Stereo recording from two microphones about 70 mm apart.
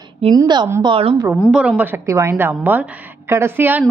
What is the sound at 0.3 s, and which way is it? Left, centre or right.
Speech, right.